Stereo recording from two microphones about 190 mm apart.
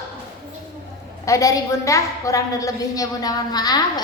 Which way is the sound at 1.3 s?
15° left (ahead or behind).